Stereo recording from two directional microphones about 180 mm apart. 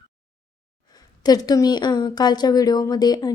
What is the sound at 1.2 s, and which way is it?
A woman's voice, 20° left (ahead or behind).